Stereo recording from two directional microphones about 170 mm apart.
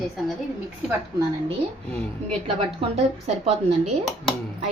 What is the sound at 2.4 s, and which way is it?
Speech, 30° right (ahead or behind).